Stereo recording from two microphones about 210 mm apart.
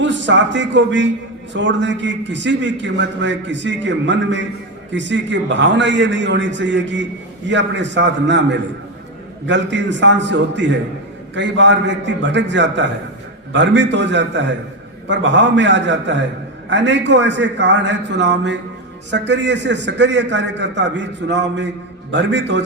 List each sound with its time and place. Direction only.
0.0 s a man's voice: 60° right (ahead or behind)